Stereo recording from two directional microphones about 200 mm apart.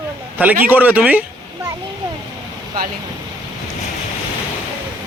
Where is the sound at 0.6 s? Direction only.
10° right (ahead or behind).